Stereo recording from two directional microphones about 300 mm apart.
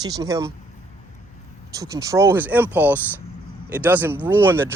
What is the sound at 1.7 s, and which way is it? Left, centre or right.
Speech, centre.